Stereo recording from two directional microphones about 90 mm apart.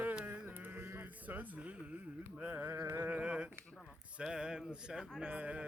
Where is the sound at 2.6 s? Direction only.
30° right (ahead or behind).